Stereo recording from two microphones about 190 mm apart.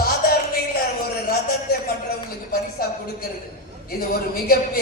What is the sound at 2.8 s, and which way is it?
Speech, 50° left (ahead or behind).